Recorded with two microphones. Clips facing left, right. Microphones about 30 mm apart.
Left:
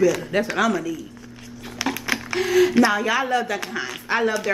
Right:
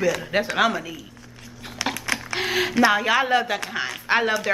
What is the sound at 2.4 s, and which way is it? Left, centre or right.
Speech, right.